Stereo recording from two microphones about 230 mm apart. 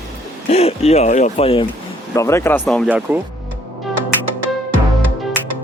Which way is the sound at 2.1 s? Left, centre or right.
Centre.